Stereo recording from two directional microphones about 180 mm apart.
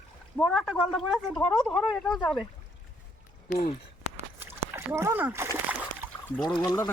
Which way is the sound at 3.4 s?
55° left (ahead or behind).